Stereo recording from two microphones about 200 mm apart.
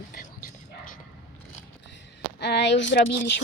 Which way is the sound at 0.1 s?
45° left (ahead or behind).